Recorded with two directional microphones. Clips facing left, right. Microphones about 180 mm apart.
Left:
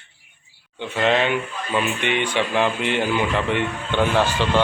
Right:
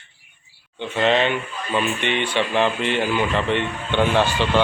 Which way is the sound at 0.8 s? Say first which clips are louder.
Right 1 dB; 10° left (ahead or behind).